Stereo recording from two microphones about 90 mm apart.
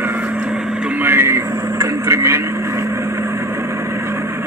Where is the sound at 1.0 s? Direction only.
25° right (ahead or behind).